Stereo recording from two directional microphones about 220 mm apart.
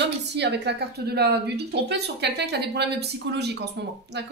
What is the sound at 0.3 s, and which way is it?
Speech, 50° right (ahead or behind).